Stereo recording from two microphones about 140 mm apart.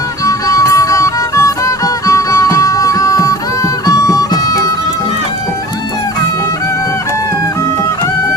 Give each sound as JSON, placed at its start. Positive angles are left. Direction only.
{"t": 0.3, "sound": "music", "side_deg": 25}